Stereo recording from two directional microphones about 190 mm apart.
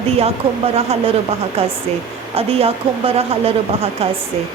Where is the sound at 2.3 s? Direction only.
30° right (ahead or behind).